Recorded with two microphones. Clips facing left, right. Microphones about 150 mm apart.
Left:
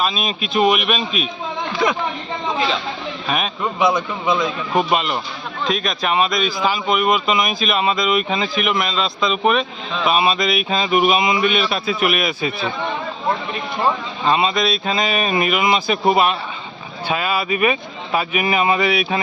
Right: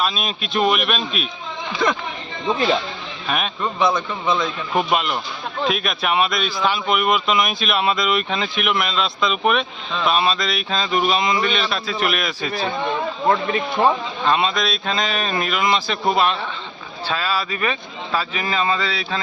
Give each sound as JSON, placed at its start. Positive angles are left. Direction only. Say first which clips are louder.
{"t": 0.0, "sound": "speech", "louder": "left 2 dB", "side_deg": 0}
{"t": 3.2, "sound": "speech", "louder": "left 1 dB", "side_deg": 0}
{"t": 3.8, "sound": "speech", "louder": "left 2 dB", "side_deg": 15}
{"t": 4.8, "sound": "speech", "louder": "left 1 dB", "side_deg": 0}
{"t": 14.3, "sound": "speech", "louder": "left 2 dB", "side_deg": 0}